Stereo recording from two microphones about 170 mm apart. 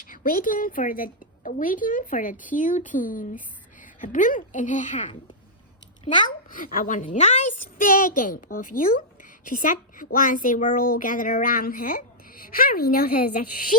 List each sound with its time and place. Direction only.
0.0 s a woman's voice: 55° left (ahead or behind)
6.5 s a woman's voice: 55° left (ahead or behind)